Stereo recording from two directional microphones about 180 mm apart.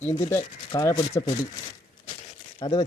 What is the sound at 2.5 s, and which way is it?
Speech, 25° left (ahead or behind).